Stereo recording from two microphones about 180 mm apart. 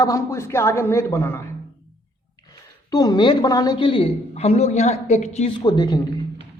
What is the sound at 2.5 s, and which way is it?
A woman's voice, 20° left (ahead or behind).